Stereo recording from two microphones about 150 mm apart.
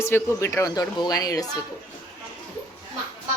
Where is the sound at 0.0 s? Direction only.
20° left (ahead or behind).